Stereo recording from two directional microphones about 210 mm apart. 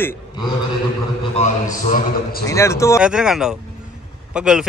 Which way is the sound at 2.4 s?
15° left (ahead or behind).